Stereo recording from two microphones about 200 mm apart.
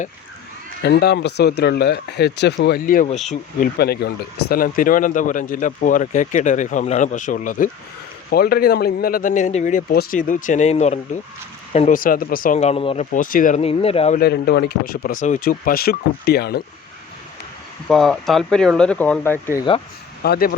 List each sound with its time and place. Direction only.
0.8 s speech: 55° left (ahead or behind)
2.6 s speech: 45° left (ahead or behind)
3.8 s speech: 55° left (ahead or behind); by 13.1 s 30° left (ahead or behind)
13.1 s speech: 40° left (ahead or behind)
14.2 s speech: 50° left (ahead or behind)
17.8 s speech: centre (ahead or behind)
20.2 s speech: 50° left (ahead or behind)